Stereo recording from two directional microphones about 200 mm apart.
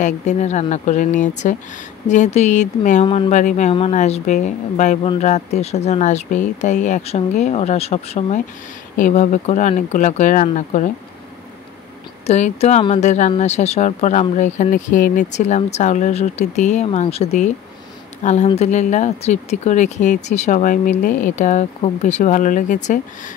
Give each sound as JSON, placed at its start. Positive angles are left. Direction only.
{"t": 0.0, "sound": "speech", "side_deg": 35}
{"t": 12.3, "sound": "speech", "side_deg": 35}